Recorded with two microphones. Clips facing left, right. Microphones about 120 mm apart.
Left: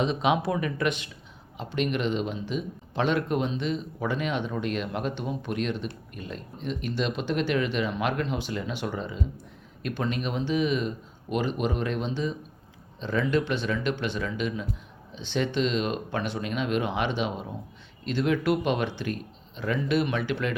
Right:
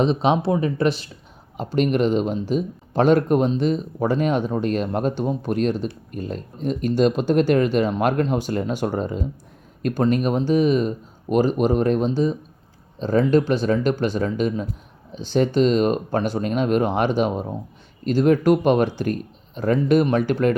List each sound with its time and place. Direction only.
0.0 s speech: 35° right (ahead or behind)